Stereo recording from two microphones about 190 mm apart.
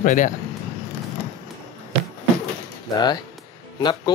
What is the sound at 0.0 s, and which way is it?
Speech, 45° left (ahead or behind).